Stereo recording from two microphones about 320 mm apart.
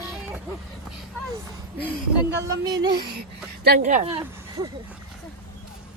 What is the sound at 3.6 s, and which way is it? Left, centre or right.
Speech, right.